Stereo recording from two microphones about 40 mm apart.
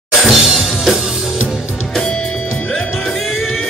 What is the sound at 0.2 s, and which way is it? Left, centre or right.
Music, centre.